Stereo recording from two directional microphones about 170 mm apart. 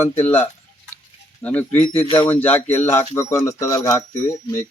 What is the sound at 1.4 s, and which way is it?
Speech, 10° left (ahead or behind).